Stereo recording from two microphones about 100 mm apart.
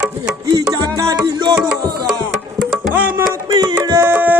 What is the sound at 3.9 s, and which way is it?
Music, 20° right (ahead or behind).